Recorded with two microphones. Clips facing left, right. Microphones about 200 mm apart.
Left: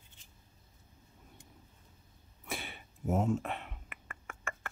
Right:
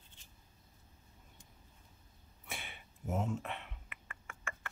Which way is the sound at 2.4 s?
40° left (ahead or behind).